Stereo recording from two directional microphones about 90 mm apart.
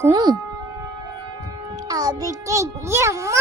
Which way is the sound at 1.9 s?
45° right (ahead or behind).